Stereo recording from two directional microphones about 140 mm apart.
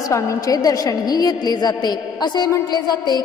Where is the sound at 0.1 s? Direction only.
25° left (ahead or behind).